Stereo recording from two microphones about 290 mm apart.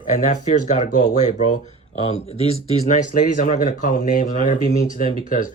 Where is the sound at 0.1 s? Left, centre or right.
Left.